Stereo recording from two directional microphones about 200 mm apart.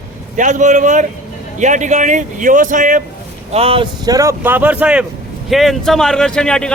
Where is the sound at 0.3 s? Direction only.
40° right (ahead or behind).